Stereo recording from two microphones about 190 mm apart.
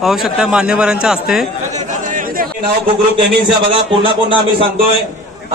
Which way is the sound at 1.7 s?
40° right (ahead or behind).